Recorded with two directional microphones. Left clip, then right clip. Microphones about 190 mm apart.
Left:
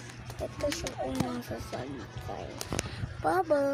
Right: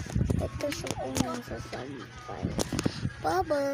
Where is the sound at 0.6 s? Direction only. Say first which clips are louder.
Left 5 dB; 20° right (ahead or behind).